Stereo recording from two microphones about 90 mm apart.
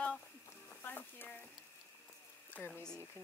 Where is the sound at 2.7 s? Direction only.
10° left (ahead or behind).